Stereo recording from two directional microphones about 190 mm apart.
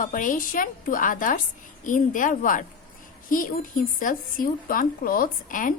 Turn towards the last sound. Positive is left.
turn(degrees=45)  # may be behind; listen again after turning